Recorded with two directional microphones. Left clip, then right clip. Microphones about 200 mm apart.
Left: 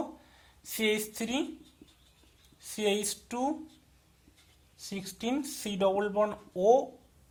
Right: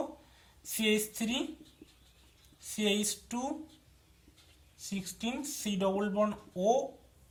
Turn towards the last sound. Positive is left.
turn(degrees=40)  # may be behind; listen again after turning